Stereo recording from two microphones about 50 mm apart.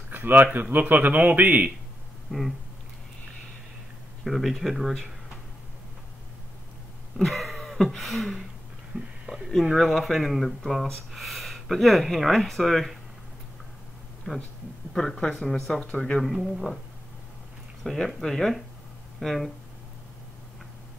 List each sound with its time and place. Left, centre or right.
0.1 s a man's voice: right
2.3 s speech: centre
4.2 s speech: centre
7.2 s a sound: centre
9.5 s speech: centre
14.3 s speech: centre
15.9 s speech: left
16.2 s speech: centre
17.8 s speech: centre